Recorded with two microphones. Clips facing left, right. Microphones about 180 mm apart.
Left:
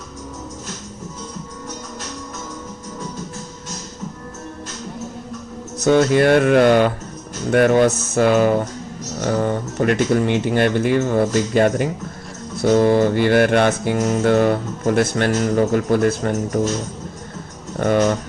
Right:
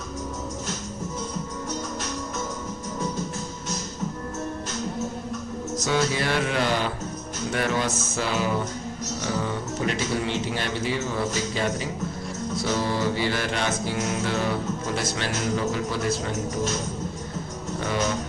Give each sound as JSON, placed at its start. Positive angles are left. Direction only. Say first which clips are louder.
{"t": 5.8, "sound": "music", "louder": "left 12 dB", "side_deg": 55}
{"t": 17.7, "sound": "music", "louder": "left 10 dB", "side_deg": 55}